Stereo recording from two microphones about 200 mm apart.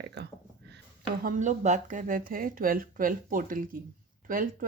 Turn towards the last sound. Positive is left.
turn(degrees=-45)  # may be behind; listen again after turning